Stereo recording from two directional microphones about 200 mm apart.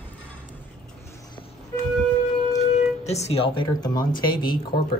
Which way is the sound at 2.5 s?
35° left (ahead or behind).